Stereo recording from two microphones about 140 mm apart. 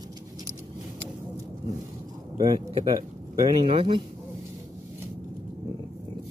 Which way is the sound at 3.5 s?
40° right (ahead or behind).